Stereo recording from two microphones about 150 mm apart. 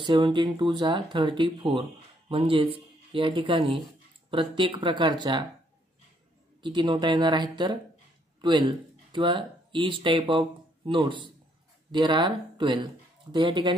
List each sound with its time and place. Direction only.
0.0 s speech: 30° right (ahead or behind)
6.6 s speech: 30° right (ahead or behind)